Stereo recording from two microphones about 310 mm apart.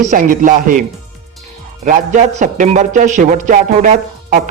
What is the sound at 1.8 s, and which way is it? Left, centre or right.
A man's voice, right.